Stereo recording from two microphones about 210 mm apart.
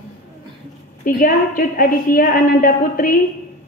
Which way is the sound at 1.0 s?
40° left (ahead or behind).